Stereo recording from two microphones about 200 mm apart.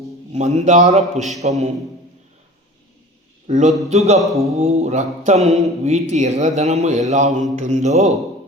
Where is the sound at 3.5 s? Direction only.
35° right (ahead or behind).